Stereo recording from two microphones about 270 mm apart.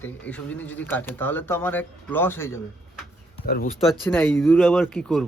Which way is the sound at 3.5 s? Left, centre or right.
Left.